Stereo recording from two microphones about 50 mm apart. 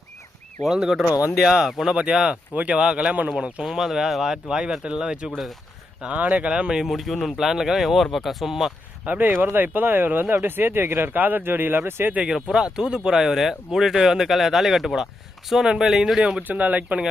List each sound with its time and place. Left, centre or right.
0.7 s speech: centre
2.3 s speech: right
3.7 s speech: centre
6.1 s speech: right
6.8 s speech: centre
9.0 s speech: right
12.3 s speech: centre
16.4 s speech: right